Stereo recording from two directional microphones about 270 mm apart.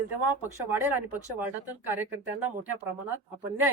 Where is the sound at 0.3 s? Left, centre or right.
Centre.